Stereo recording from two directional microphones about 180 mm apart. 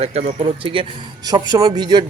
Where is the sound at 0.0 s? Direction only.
35° right (ahead or behind).